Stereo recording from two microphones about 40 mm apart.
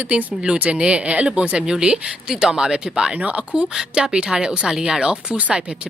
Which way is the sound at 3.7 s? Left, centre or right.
Centre.